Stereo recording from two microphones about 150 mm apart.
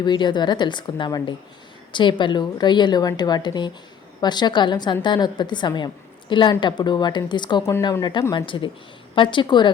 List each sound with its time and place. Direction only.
0.0 s a woman's voice: 30° left (ahead or behind)